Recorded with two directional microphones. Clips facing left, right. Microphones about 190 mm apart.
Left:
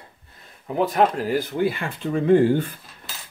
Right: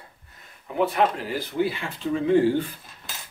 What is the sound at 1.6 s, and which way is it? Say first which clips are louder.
Speech: left 2 dB; 50° left (ahead or behind).